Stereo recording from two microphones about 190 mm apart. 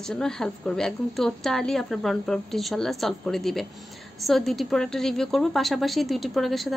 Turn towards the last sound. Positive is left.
turn(degrees=0)  # may be behind; listen again after turning